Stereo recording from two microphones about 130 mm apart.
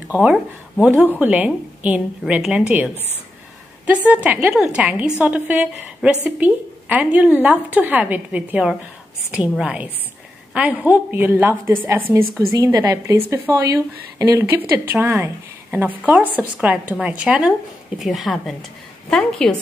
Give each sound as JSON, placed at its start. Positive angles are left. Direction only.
{"t": 0.1, "sound": "a woman's voice", "side_deg": -5}